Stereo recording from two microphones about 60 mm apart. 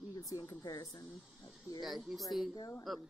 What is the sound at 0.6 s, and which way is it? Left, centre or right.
Speech, left.